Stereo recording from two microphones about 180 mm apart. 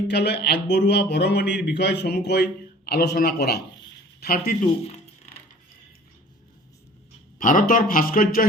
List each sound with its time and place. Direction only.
0.1 s speech: 65° left (ahead or behind)
7.3 s speech: 50° left (ahead or behind)